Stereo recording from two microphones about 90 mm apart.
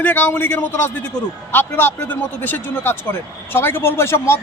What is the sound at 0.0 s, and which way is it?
A man's voice, 20° left (ahead or behind).